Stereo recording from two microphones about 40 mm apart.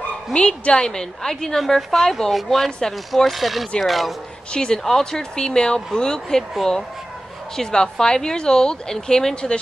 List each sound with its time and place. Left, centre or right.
0.3 s a woman's voice: left; by 4.1 s centre
4.5 s a woman's voice: left
4.8 s a woman's voice: centre
5.4 s a woman's voice: centre
7.5 s a woman's voice: centre